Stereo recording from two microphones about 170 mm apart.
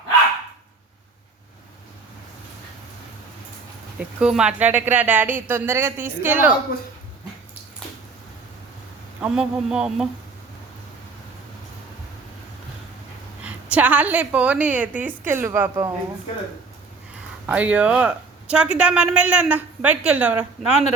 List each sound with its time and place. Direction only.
4.2 s speech: 5° right (ahead or behind)
9.2 s a sound: 5° right (ahead or behind)
13.4 s speech: 5° right (ahead or behind)
17.4 s speech: 10° right (ahead or behind)